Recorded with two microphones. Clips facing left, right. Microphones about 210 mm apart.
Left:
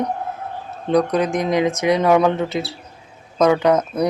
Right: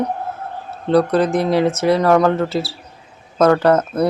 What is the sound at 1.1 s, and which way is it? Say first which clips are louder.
Speech: right 3 dB; 10° left (ahead or behind).